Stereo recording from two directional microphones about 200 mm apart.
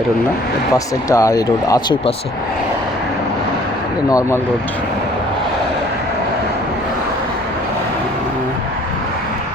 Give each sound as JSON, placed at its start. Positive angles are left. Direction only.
{"t": 1.1, "sound": "speech", "side_deg": 15}
{"t": 4.1, "sound": "speech", "side_deg": 15}